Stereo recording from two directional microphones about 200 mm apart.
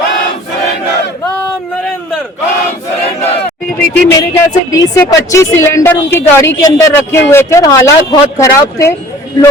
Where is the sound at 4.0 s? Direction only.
10° left (ahead or behind).